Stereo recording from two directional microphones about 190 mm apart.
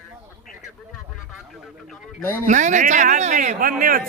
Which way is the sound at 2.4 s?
40° right (ahead or behind).